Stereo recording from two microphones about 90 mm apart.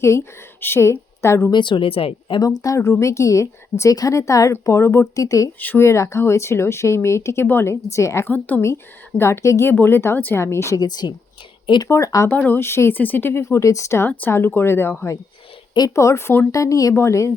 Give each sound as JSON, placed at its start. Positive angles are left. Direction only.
{"t": 0.0, "sound": "a woman's voice", "side_deg": 30}
{"t": 1.5, "sound": "speech", "side_deg": 60}
{"t": 2.4, "sound": "speech", "side_deg": 40}
{"t": 5.5, "sound": "speech", "side_deg": 20}
{"t": 5.8, "sound": "speech", "side_deg": 30}
{"t": 8.3, "sound": "speech", "side_deg": 20}
{"t": 8.6, "sound": "speech", "side_deg": 30}
{"t": 10.8, "sound": "speech", "side_deg": 50}
{"t": 11.9, "sound": "speech", "side_deg": 35}
{"t": 14.1, "sound": "speech", "side_deg": 20}
{"t": 16.5, "sound": "speech", "side_deg": 35}